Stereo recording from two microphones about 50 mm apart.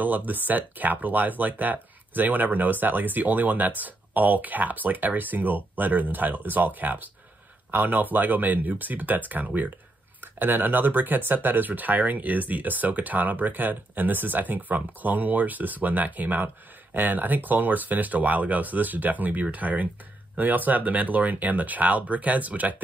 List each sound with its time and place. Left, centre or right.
0.0 s speech: right